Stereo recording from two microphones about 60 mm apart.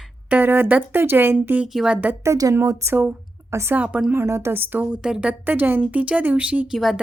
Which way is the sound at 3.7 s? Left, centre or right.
Right.